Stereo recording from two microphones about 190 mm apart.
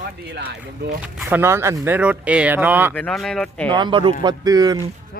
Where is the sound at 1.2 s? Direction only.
10° right (ahead or behind).